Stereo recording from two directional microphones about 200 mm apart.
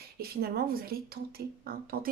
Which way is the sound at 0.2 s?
50° right (ahead or behind).